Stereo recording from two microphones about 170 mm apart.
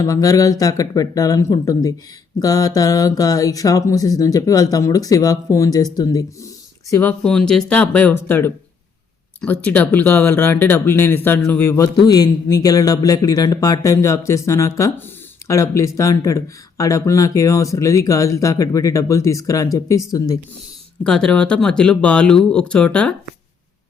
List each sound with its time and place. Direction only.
0.0 s speech: 20° left (ahead or behind)
6.9 s speech: 10° left (ahead or behind)
21.0 s speech: 5° left (ahead or behind)